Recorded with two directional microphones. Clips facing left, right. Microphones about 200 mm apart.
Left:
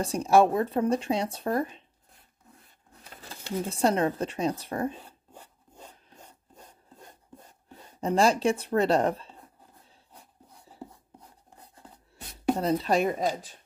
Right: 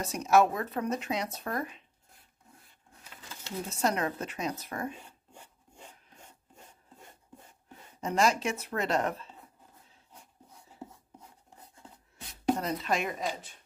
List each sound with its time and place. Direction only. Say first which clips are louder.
0.0 s speech: left 3 dB; 30° left (ahead or behind)
3.0 s a sound: left 4 dB; 35° left (ahead or behind)
3.6 s speech: left 5 dB; 30° left (ahead or behind)
5.0 s rub: left 3 dB; 35° left (ahead or behind)
8.0 s speech: left 5 dB; 30° left (ahead or behind)
12.5 s speech: left 6 dB; 35° left (ahead or behind)